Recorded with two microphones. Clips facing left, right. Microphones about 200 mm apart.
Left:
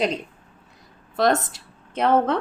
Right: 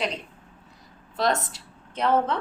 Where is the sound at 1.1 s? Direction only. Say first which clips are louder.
Left 5 dB; 50° left (ahead or behind).